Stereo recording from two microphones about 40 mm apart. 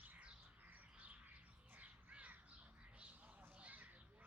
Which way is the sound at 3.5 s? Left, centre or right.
Right.